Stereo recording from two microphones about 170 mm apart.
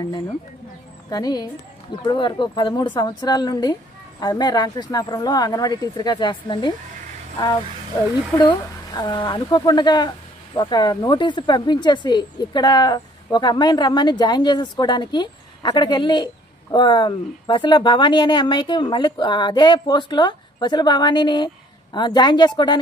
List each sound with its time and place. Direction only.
1.1 s a woman's voice: 25° left (ahead or behind)
8.4 s a woman's voice: 25° left (ahead or behind)